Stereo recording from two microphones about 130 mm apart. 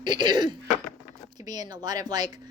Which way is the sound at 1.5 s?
30° right (ahead or behind).